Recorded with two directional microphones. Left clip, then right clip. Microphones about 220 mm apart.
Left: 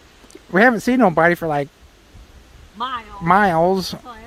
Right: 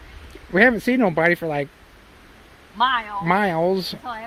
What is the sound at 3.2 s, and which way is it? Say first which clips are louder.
Speech: left 7 dB; 25° left (ahead or behind).